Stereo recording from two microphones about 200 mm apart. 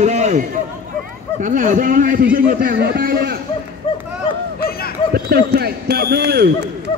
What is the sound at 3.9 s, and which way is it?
Run, 30° left (ahead or behind).